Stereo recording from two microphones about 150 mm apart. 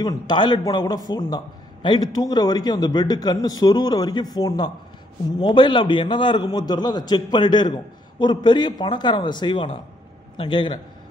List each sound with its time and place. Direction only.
0.0 s a man's voice: 30° left (ahead or behind)